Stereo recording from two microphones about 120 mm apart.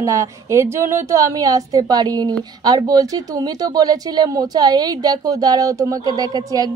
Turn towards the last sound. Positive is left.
turn(degrees=-30)  # may be behind; listen again after turning